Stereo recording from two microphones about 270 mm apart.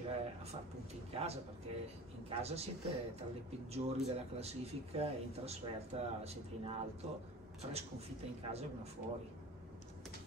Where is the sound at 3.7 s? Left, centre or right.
Right.